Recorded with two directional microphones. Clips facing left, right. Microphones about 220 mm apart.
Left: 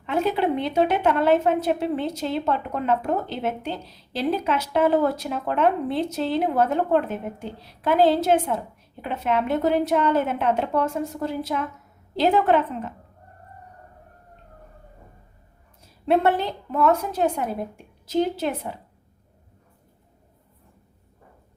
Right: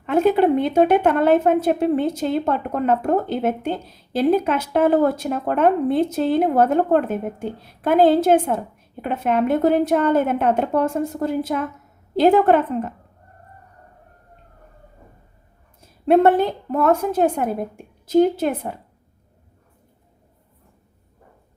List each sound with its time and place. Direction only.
0.0 s a woman's voice: 50° right (ahead or behind)
16.0 s a woman's voice: 50° right (ahead or behind)